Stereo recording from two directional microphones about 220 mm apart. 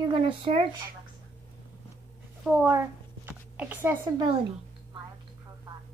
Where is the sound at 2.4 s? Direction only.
5° right (ahead or behind).